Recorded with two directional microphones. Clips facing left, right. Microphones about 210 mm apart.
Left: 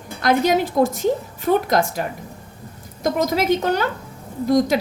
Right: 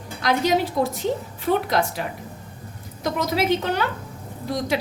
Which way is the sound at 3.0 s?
45° left (ahead or behind).